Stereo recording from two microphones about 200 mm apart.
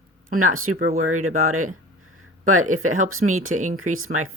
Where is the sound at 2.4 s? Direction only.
90° right.